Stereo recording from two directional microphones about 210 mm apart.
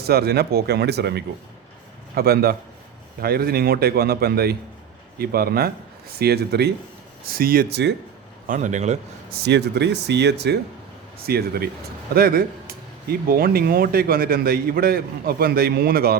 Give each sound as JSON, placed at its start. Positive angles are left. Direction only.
{"t": 0.0, "sound": "speech", "side_deg": -50}
{"t": 8.4, "sound": "a man's voice", "side_deg": -35}
{"t": 9.4, "sound": "speech", "side_deg": -55}